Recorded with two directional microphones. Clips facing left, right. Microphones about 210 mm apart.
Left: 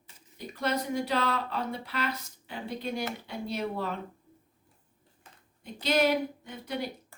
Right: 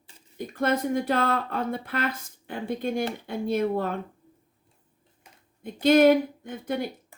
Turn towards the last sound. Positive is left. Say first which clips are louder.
# right 5 dB
turn(degrees=-50)  # may be behind; listen again after turning